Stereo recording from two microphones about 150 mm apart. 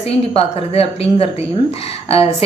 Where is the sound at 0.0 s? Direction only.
40° left (ahead or behind).